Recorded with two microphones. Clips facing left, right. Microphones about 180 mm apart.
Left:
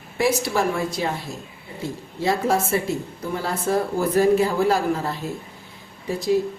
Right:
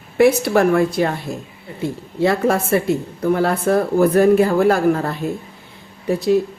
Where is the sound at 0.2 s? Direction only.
60° right (ahead or behind).